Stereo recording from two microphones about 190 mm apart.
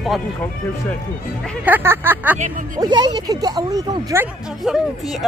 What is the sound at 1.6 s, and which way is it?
Speech, 10° right (ahead or behind).